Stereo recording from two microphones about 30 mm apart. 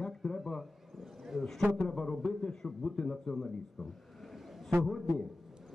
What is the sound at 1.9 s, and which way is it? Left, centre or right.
Speech, centre.